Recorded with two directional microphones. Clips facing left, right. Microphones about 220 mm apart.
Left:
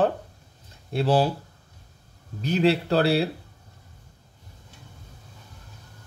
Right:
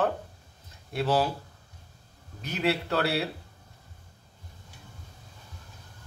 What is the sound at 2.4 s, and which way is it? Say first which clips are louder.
Speech: left 7 dB; 30° left (ahead or behind).